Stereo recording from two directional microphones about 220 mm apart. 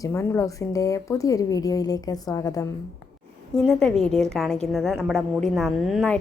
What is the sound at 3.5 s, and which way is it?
A man's voice, centre (ahead or behind).